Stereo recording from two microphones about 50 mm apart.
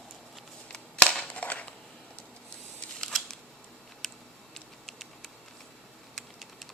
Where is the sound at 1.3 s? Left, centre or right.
Left.